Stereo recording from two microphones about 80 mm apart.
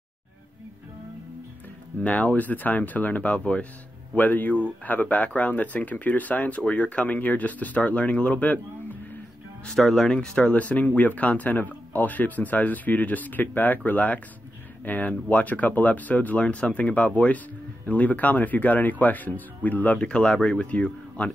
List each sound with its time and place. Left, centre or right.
2.0 s speech: centre
9.7 s speech: centre